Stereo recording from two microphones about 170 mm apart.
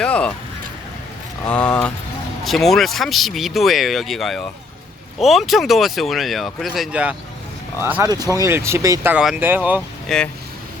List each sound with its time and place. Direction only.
0.0 s a sound: 5° left (ahead or behind)
1.5 s speech: 5° left (ahead or behind); by 9.8 s 10° right (ahead or behind)
10.1 s speech: 5° left (ahead or behind)